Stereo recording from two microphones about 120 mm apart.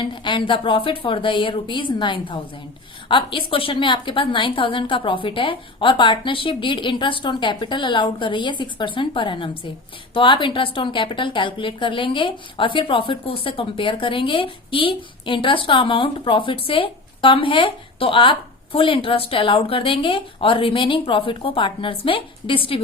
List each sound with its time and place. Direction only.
0.0 s a woman's voice: 40° left (ahead or behind)